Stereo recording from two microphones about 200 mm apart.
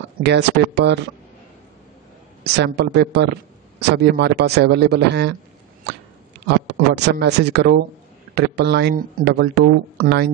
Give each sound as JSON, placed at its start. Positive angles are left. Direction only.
{"t": 0.2, "sound": "speech", "side_deg": -60}
{"t": 2.4, "sound": "speech", "side_deg": -55}
{"t": 6.4, "sound": "speech", "side_deg": -60}